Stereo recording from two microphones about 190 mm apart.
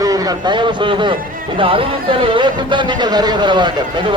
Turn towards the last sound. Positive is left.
turn(degrees=-25)  # may be behind; listen again after turning